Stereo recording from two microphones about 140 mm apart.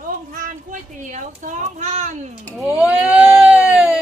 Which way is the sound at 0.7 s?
65° right (ahead or behind).